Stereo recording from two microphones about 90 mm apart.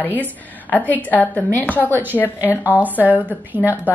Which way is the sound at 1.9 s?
20° right (ahead or behind).